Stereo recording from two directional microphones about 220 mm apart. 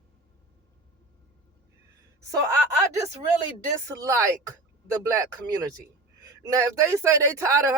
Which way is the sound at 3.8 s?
15° right (ahead or behind).